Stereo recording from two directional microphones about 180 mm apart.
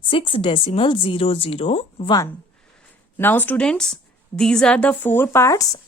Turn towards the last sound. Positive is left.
turn(degrees=20)  # may be behind; listen again after turning